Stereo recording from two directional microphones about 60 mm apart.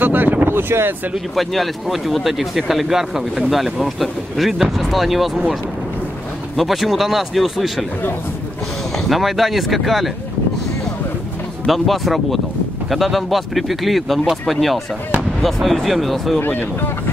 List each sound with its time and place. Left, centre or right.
0.0 s wind noise: right
1.3 s speech: centre
6.5 s speech: centre
8.9 s speech: centre
11.6 s speech: centre
16.3 s speech: left